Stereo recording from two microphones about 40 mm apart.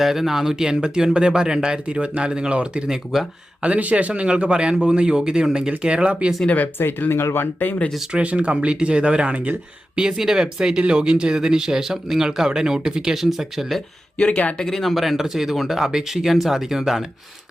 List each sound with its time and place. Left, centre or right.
0.0 s speech: centre
1.1 s speech: right
1.9 s speech: right
2.8 s speech: centre
3.6 s speech: right
7.1 s speech: left
7.6 s speech: left
8.1 s speech: right
10.0 s speech: centre
14.2 s speech: left
14.6 s speech: centre